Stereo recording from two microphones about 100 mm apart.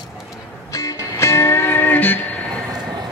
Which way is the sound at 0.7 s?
30° left (ahead or behind).